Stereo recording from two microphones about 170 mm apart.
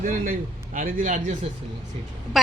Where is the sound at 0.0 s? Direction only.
50° right (ahead or behind).